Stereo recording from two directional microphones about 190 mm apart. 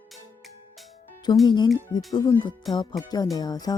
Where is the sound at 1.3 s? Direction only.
20° left (ahead or behind).